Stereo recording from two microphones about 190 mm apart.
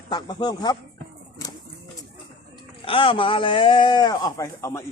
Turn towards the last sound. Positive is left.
turn(degrees=15)  # may be behind; listen again after turning